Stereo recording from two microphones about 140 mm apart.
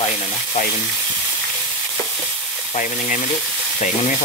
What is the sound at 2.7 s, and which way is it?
Speech, 65° left (ahead or behind).